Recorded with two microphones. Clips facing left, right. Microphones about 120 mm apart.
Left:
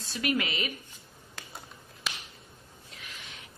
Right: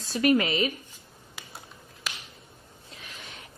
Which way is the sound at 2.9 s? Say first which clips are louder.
Right 2 dB; 40° right (ahead or behind).